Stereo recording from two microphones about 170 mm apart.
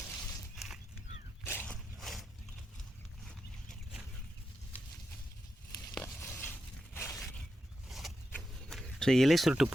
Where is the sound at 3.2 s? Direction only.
Centre (ahead or behind).